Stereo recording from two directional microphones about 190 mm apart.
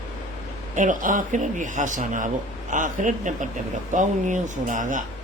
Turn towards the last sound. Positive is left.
turn(degrees=-45)  # may be behind; listen again after turning